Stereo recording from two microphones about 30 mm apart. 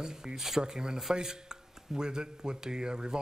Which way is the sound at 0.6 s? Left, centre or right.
Right.